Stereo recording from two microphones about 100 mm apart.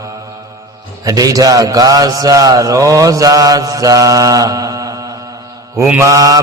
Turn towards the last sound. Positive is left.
turn(degrees=-35)  # may be behind; listen again after turning